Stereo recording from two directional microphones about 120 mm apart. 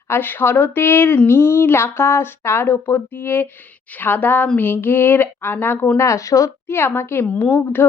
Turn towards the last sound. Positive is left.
turn(degrees=15)  # may be behind; listen again after turning